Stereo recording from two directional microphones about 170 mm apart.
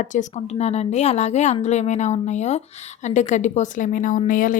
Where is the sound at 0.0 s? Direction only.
45° left (ahead or behind).